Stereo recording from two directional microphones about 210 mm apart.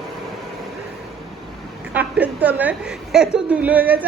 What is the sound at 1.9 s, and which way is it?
A woman's voice, 5° right (ahead or behind).